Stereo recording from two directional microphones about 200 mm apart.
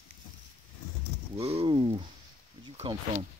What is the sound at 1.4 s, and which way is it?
Speech, 30° right (ahead or behind).